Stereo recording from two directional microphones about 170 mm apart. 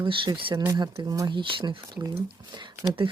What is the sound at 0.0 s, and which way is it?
Speech, 30° right (ahead or behind).